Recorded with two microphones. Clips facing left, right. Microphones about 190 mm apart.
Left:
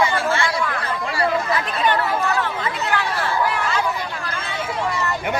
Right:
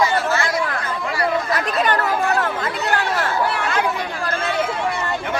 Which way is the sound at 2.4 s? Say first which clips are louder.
Right 2 dB; 45° right (ahead or behind).